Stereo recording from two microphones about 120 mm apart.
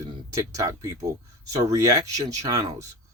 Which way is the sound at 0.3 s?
25° right (ahead or behind).